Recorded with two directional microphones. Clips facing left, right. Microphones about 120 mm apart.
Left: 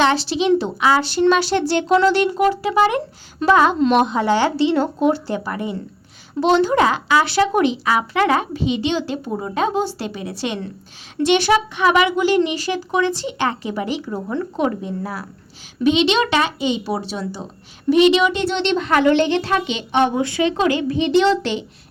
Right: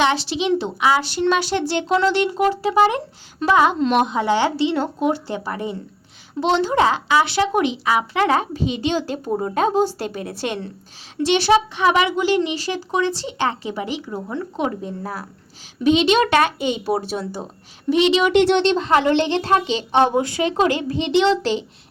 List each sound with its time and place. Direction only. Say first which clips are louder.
0.0 s speech: left 2 dB; 15° right (ahead or behind)
3.4 s speech: left 2 dB; 15° right (ahead or behind)
5.3 s speech: left 2 dB; 30° right (ahead or behind); by 10.6 s 45° right (ahead or behind)
11.2 s speech: even; 30° right (ahead or behind)
14.8 s speech: left 2 dB; 45° right (ahead or behind)
17.8 s speech: left 3 dB; 25° right (ahead or behind)
18.3 s speech: right 6 dB; 75° right (ahead or behind)
18.6 s speech: right 1 dB; 40° right (ahead or behind)
18.9 s speech: left 2 dB; 25° right (ahead or behind)